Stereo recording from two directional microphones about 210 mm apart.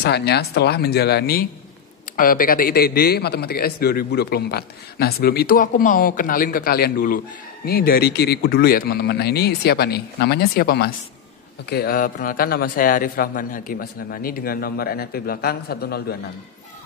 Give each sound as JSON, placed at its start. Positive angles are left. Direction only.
{"t": 0.0, "sound": "a man's voice", "side_deg": 50}